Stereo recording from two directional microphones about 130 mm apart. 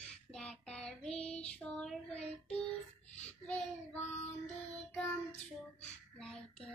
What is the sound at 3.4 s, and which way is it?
Child singing, 10° left (ahead or behind).